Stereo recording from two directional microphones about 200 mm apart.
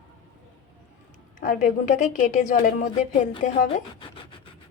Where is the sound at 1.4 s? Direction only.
40° left (ahead or behind).